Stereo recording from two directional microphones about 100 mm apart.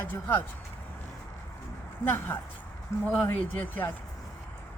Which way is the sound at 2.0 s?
20° left (ahead or behind).